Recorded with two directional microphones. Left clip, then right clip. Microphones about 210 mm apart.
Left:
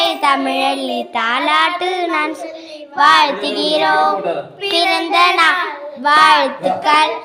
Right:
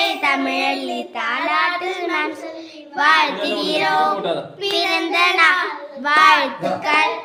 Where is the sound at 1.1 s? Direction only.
20° left (ahead or behind).